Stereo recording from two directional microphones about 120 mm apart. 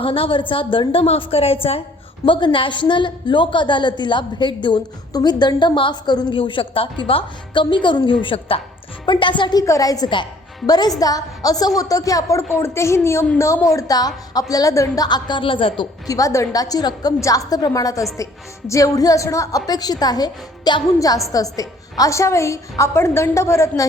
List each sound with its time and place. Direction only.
0.0 s a woman's voice: 50° left (ahead or behind)
2.2 s a woman's voice: 45° left (ahead or behind)
16.0 s a woman's voice: 30° left (ahead or behind)